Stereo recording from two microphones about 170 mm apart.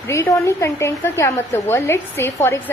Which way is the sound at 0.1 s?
15° left (ahead or behind).